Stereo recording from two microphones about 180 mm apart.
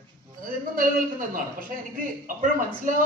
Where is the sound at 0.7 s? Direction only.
50° right (ahead or behind).